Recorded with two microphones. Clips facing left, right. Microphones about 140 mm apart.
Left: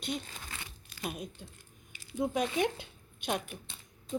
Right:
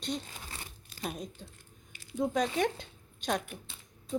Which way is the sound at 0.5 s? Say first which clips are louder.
Even; 40° right (ahead or behind).